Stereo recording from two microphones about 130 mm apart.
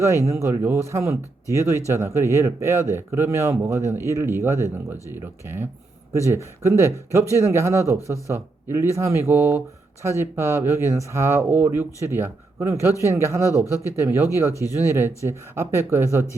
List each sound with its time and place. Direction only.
0.3 s speech: 25° right (ahead or behind)